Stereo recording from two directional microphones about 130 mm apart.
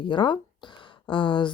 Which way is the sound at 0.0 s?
40° left (ahead or behind).